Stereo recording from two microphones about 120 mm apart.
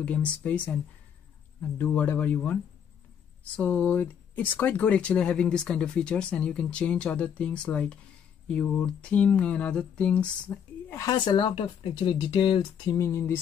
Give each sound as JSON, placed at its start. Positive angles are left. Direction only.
{"t": 0.0, "sound": "speech", "side_deg": 10}
{"t": 11.0, "sound": "speech", "side_deg": 35}
{"t": 12.9, "sound": "a sound", "side_deg": 20}